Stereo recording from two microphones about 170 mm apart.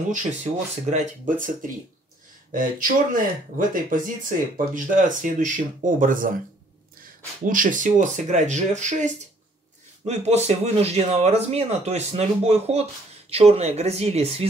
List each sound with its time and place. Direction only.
0.1 s speech: 45° right (ahead or behind)
7.4 s speech: 50° right (ahead or behind)